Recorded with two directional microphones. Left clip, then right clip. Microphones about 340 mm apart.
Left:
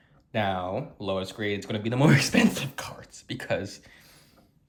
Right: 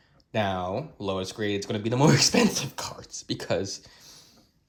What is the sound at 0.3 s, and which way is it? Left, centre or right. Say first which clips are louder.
Speech: even; centre.